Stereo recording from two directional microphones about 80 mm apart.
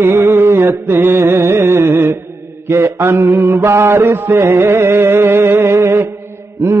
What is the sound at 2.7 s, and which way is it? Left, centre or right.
Mantra, right.